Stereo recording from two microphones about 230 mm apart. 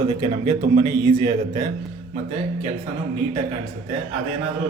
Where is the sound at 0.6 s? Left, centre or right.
Right.